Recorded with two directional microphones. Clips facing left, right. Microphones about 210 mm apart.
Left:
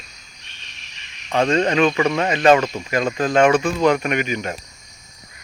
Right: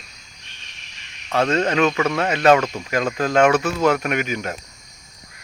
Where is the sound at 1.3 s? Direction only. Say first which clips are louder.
Left 1 dB; 10° left (ahead or behind).